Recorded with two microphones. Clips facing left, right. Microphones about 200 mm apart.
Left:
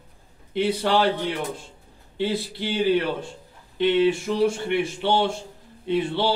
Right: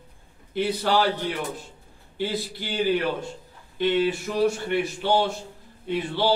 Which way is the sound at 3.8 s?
25° left (ahead or behind).